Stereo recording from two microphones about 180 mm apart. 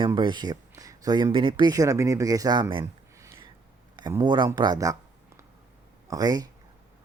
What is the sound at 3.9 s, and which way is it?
Speech, 25° right (ahead or behind).